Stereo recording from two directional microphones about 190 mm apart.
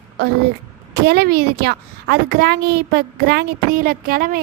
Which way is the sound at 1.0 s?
55° right (ahead or behind).